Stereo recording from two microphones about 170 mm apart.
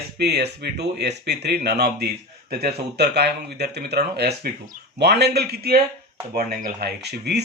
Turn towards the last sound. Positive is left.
turn(degrees=-75)  # may be behind; listen again after turning